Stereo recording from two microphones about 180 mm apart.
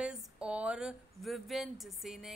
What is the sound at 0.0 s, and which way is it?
Speech, 5° right (ahead or behind).